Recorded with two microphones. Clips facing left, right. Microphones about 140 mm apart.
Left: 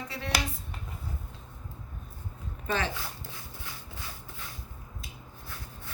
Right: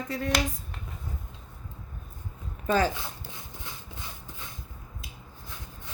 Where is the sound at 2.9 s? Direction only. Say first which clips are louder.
Right 1 dB; 20° right (ahead or behind).